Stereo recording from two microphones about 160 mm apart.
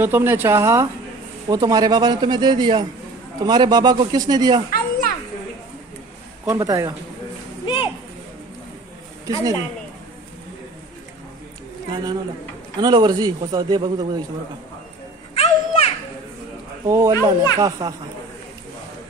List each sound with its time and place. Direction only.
0.0 s a man's voice: 15° right (ahead or behind)
6.4 s a man's voice: 20° right (ahead or behind)
7.6 s a sound: 30° left (ahead or behind)
9.2 s a woman's voice: 20° right (ahead or behind)
11.9 s a man's voice: 30° right (ahead or behind)
15.3 s children playing: 40° left (ahead or behind)
16.8 s a man's voice: 20° right (ahead or behind)